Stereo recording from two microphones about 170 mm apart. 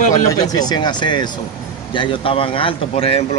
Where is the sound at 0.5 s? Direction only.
25° left (ahead or behind).